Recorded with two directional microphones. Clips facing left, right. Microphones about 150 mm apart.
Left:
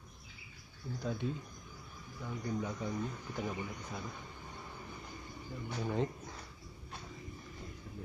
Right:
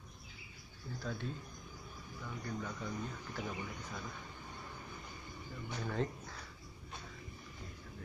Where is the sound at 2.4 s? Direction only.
15° left (ahead or behind).